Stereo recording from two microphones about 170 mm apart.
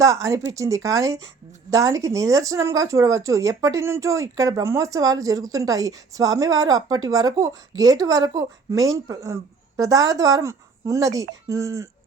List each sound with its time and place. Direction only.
0.0 s speech: 20° right (ahead or behind)